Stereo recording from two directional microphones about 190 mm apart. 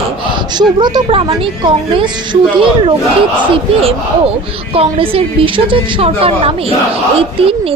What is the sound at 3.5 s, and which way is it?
A woman's voice, 30° right (ahead or behind).